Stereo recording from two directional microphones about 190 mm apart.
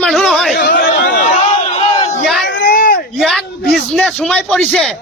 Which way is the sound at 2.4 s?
60° left (ahead or behind).